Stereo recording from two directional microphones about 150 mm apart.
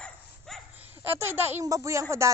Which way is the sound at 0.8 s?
15° right (ahead or behind).